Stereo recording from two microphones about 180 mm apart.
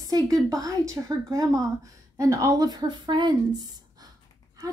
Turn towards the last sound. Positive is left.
turn(degrees=-20)  # may be behind; listen again after turning